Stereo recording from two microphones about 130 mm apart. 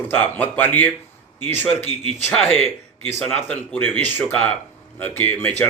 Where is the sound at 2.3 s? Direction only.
5° left (ahead or behind).